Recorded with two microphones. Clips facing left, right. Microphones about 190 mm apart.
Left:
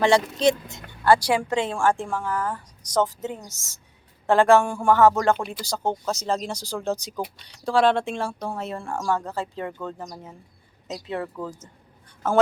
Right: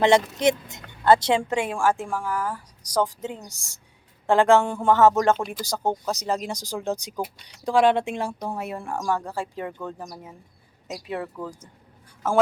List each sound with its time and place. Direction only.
0.0 s speech: 20° right (ahead or behind)
10.8 s speech: 25° left (ahead or behind)